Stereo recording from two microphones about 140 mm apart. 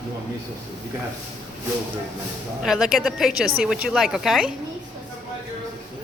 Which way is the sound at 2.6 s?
5° right (ahead or behind).